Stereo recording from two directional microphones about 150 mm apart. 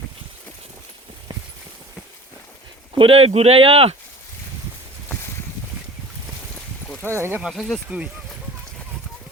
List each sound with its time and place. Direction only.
3.0 s speech: 40° right (ahead or behind)
7.0 s speech: 15° right (ahead or behind)
7.5 s speech: centre (ahead or behind)
7.9 s speech: 10° right (ahead or behind)